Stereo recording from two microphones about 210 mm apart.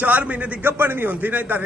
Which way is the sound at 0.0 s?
5° right (ahead or behind).